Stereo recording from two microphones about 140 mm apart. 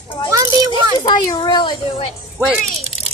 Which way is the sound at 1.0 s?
30° left (ahead or behind).